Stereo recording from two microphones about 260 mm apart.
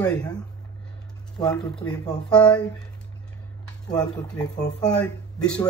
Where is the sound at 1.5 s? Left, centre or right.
Centre.